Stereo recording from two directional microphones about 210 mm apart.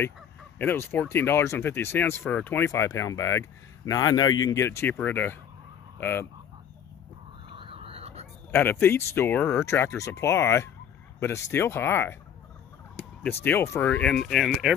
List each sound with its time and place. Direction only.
0.6 s speech: 10° left (ahead or behind)
7.5 s a sound: 25° right (ahead or behind)
8.5 s speech: 10° left (ahead or behind)